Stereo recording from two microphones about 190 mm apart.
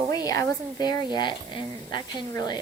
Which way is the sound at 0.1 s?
20° left (ahead or behind).